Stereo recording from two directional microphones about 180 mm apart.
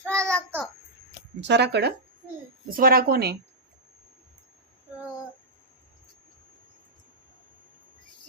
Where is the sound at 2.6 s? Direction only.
50° right (ahead or behind).